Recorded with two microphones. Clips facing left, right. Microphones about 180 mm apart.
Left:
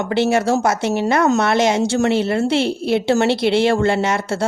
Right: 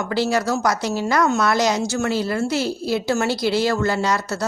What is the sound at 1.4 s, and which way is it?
A woman's voice, 25° left (ahead or behind).